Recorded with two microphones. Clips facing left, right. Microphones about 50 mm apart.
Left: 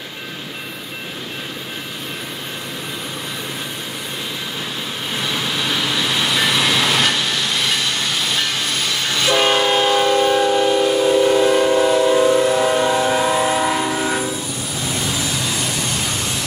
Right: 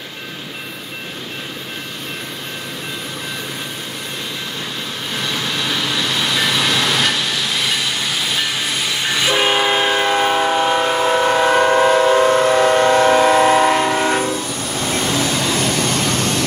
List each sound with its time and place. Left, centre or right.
5.1 s vehicle: centre
10.2 s train: right
10.7 s train: right
14.9 s vehicle: right